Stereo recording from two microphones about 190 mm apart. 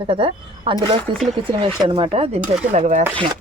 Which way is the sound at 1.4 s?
25° right (ahead or behind).